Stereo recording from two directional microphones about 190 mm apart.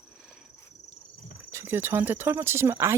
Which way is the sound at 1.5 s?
15° right (ahead or behind).